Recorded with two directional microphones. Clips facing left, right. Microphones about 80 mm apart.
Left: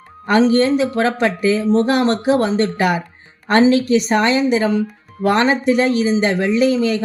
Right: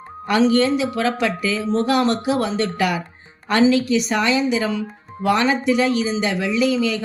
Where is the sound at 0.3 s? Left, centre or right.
Left.